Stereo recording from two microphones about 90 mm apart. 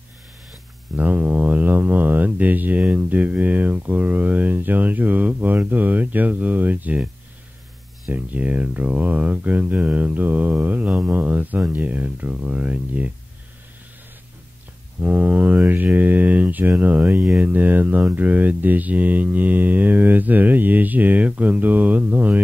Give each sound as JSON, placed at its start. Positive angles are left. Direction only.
{"t": 0.9, "sound": "speech", "side_deg": -20}
{"t": 8.1, "sound": "speech", "side_deg": -15}
{"t": 15.0, "sound": "speech", "side_deg": -20}